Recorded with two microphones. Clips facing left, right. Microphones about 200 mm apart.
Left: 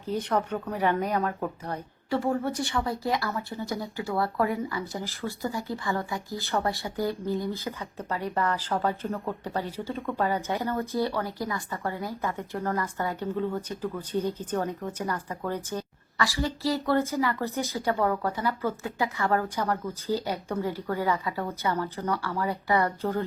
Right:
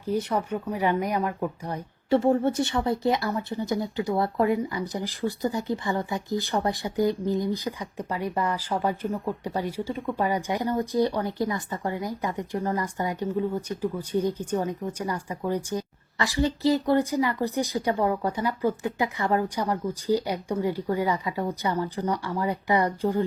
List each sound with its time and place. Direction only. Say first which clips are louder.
0.0 s speech: right 1 dB; 10° right (ahead or behind)
2.0 s speech: right 6 dB; 25° right (ahead or behind)